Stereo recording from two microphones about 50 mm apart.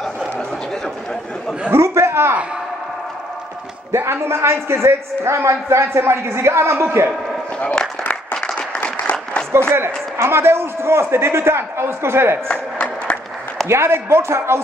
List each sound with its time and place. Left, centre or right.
1.8 s a sound: right
3.9 s a man's voice: right
7.6 s applause: centre
8.0 s applause: left
9.5 s a man's voice: right
12.4 s a sound: centre
13.7 s a man's voice: right